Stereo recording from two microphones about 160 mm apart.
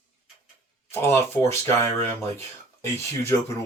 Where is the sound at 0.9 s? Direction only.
15° left (ahead or behind).